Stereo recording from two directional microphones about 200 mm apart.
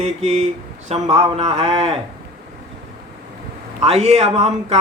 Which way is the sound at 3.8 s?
30° right (ahead or behind).